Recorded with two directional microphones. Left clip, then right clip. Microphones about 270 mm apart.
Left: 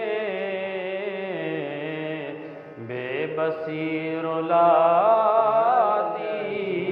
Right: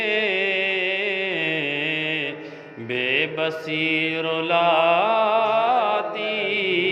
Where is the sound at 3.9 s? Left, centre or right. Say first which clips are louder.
Right 5 dB; right.